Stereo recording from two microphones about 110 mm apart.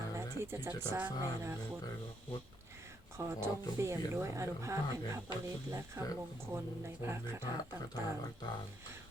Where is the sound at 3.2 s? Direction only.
25° right (ahead or behind).